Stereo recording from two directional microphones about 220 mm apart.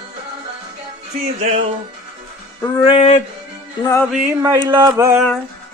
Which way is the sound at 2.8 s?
25° left (ahead or behind).